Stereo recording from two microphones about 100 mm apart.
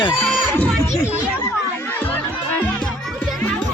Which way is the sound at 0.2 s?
15° left (ahead or behind).